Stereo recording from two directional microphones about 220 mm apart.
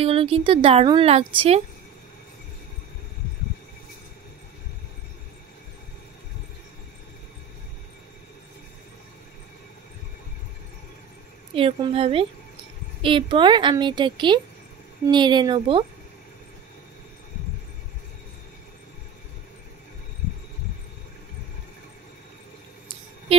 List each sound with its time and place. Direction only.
0.0 s a woman's voice: 25° right (ahead or behind)
11.5 s a woman's voice: 25° right (ahead or behind)